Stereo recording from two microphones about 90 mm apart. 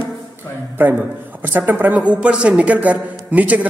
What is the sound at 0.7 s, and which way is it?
A man's voice, 20° right (ahead or behind).